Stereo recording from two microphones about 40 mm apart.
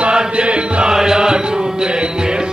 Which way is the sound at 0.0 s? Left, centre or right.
Right.